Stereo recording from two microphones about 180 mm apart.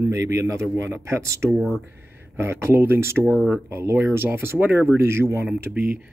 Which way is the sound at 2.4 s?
15° right (ahead or behind).